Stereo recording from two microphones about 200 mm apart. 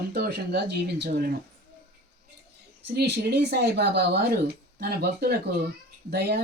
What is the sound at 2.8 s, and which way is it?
Speech, 55° right (ahead or behind).